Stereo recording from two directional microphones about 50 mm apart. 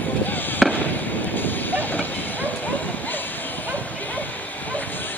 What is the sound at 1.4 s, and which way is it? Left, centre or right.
Vehicle, left.